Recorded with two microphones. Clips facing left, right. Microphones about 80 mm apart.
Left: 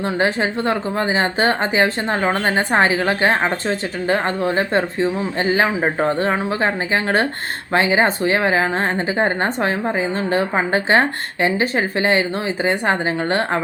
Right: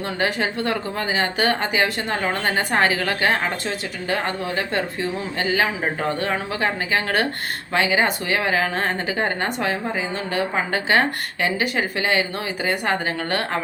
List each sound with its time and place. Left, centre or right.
0.0 s a woman's voice: left